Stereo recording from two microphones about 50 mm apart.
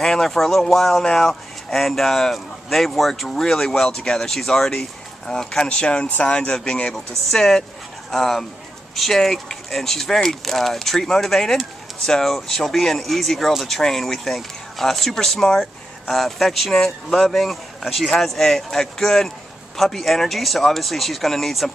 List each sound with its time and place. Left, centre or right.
0.0 s speech: centre
5.6 s speech: left
6.0 s speech: left
6.3 s speech: left
7.2 s speech: centre